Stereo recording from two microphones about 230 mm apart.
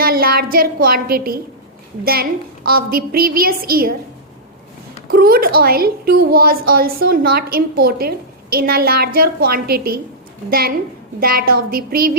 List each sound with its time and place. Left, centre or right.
0.0 s a sound: right
0.5 s a woman's voice: right
2.6 s a woman's voice: right
5.1 s a woman's voice: right
11.2 s a woman's voice: right